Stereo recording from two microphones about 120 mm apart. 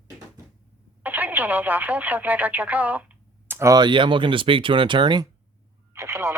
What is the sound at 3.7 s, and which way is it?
Speech, 40° right (ahead or behind).